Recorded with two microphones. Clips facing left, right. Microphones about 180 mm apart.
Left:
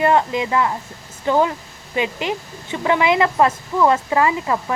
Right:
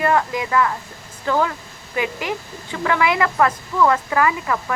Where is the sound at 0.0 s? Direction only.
20° left (ahead or behind).